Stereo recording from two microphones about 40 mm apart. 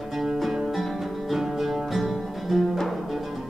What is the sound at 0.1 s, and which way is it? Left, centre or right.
Music, centre.